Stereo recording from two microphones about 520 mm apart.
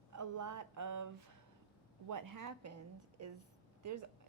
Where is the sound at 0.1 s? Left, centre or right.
Right.